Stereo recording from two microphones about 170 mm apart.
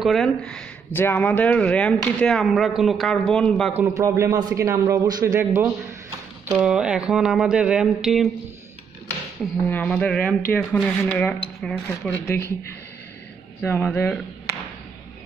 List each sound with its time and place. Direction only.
0.0 s speech: centre (ahead or behind)
3.7 s a man's voice: 15° right (ahead or behind)
6.6 s speech: 5° right (ahead or behind)
9.7 s speech: 10° left (ahead or behind)
13.6 s speech: 10° left (ahead or behind)